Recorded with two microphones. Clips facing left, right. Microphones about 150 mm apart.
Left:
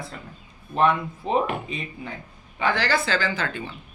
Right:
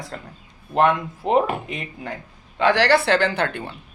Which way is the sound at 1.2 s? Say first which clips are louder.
Right 4 dB; 80° right.